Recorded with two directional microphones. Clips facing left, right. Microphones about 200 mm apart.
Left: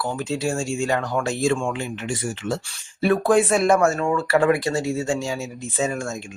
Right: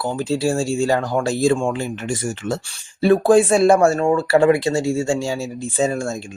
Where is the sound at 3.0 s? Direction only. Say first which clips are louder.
Right 5 dB; 30° right (ahead or behind).